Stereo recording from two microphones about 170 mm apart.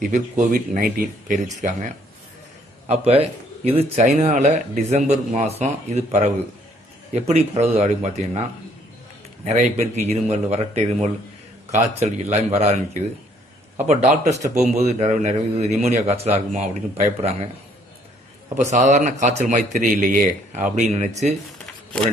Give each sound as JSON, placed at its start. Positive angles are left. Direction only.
{"t": 0.1, "sound": "a man's voice", "side_deg": -50}
{"t": 2.9, "sound": "a man's voice", "side_deg": -35}
{"t": 9.4, "sound": "a man's voice", "side_deg": -40}
{"t": 13.8, "sound": "a man's voice", "side_deg": -45}
{"t": 18.7, "sound": "a man's voice", "side_deg": -45}